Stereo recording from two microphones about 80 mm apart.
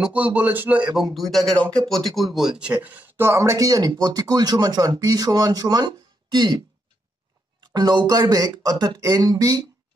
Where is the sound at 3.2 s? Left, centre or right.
Right.